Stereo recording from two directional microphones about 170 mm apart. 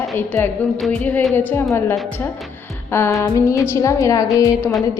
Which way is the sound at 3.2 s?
20° left (ahead or behind).